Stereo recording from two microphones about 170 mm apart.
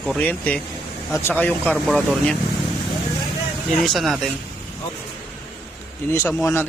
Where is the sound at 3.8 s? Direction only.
Centre (ahead or behind).